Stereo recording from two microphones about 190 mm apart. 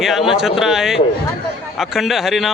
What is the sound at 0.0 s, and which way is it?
Speech, centre (ahead or behind).